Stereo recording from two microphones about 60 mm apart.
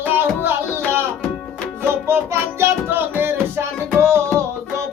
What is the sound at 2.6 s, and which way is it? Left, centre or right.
Music, right.